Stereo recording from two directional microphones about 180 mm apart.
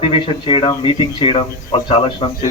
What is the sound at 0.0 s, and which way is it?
Speech, 30° left (ahead or behind).